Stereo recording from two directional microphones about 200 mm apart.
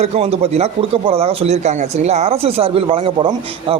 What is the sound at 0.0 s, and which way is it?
A man's voice, 30° right (ahead or behind).